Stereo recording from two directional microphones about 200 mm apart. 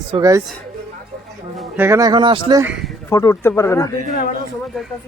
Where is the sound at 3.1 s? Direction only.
15° left (ahead or behind).